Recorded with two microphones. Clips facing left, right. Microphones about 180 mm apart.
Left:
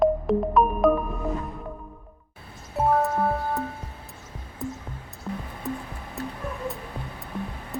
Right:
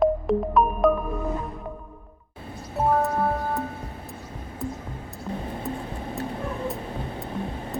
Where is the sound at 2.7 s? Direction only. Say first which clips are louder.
Even; centre (ahead or behind).